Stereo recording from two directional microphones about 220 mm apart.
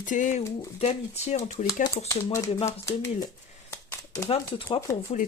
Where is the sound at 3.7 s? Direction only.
10° left (ahead or behind).